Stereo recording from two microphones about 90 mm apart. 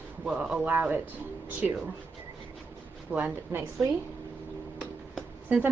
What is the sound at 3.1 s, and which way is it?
Speech, 20° right (ahead or behind).